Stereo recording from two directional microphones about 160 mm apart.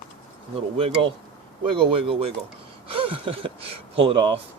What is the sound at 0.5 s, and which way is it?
Speech, 35° right (ahead or behind).